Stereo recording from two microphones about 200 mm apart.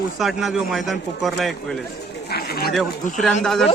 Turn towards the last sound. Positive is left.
turn(degrees=0)  # may be behind; listen again after turning